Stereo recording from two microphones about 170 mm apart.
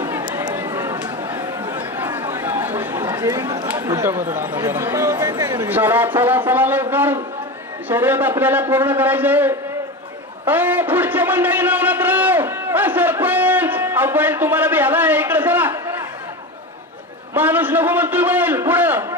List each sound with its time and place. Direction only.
0.0 s run: 25° right (ahead or behind)
0.9 s a sound: 10° right (ahead or behind)
1.8 s chatter: 10° right (ahead or behind)
3.8 s a man's voice: 15° right (ahead or behind)
10.4 s a sound: 10° right (ahead or behind)
17.3 s a man's voice: 10° right (ahead or behind)